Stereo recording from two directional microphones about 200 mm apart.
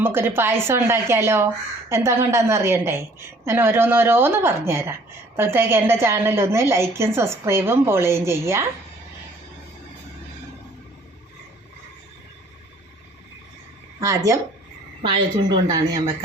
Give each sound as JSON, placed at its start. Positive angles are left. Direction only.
{"t": 0.0, "sound": "a woman's voice", "side_deg": -10}
{"t": 14.0, "sound": "a woman's voice", "side_deg": -15}